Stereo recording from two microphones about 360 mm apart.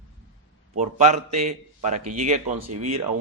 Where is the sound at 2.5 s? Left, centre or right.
Right.